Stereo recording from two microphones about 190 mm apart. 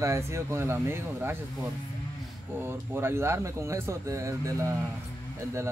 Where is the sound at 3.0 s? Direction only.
15° right (ahead or behind).